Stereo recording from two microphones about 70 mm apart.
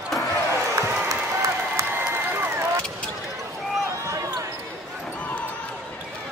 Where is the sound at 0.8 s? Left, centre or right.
Right.